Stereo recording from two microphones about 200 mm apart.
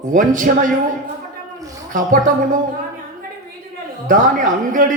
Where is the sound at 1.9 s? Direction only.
40° right (ahead or behind).